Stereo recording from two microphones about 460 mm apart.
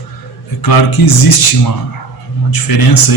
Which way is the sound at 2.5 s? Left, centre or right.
Left.